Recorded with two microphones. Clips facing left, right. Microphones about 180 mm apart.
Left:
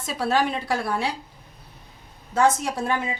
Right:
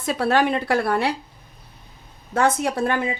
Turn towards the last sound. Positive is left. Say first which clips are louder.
# right 4 dB
turn(degrees=-60)  # may be behind; listen again after turning